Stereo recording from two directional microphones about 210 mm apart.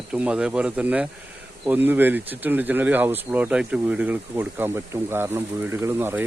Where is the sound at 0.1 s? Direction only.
5° right (ahead or behind).